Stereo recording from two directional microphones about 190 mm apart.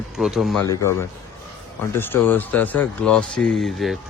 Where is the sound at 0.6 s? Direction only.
15° left (ahead or behind); by 3.9 s centre (ahead or behind).